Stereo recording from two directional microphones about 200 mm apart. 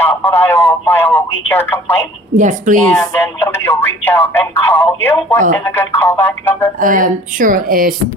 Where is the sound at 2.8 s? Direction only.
10° left (ahead or behind).